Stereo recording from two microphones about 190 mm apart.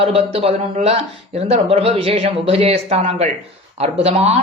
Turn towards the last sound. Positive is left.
turn(degrees=-35)  # may be behind; listen again after turning